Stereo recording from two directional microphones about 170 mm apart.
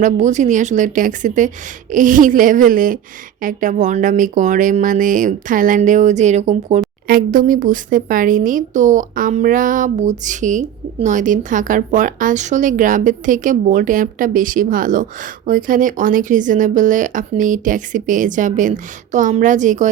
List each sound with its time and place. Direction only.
0.0 s a woman's voice: 45° right (ahead or behind)
7.1 s a woman's voice: 55° right (ahead or behind)